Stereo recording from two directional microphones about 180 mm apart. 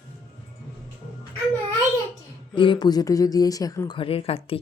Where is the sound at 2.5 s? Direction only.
25° left (ahead or behind).